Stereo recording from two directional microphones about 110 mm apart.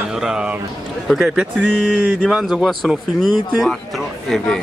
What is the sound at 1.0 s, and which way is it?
Speech, 5° right (ahead or behind).